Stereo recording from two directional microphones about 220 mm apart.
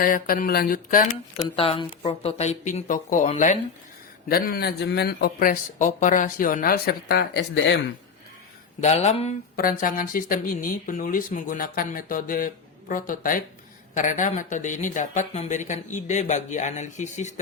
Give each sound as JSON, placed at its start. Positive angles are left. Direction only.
{"t": 0.0, "sound": "speech", "side_deg": 40}
{"t": 1.5, "sound": "speech", "side_deg": 25}
{"t": 8.8, "sound": "speech", "side_deg": 30}